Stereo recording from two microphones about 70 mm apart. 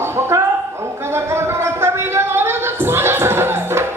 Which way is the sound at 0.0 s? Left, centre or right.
Right.